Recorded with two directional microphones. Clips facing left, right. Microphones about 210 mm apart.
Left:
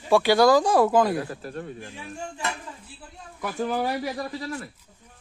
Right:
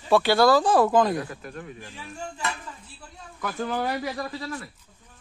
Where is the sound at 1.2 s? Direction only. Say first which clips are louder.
Left 3 dB; 35° left (ahead or behind).